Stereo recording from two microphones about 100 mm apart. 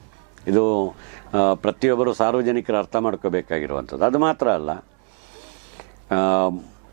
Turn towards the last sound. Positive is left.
turn(degrees=-15)  # may be behind; listen again after turning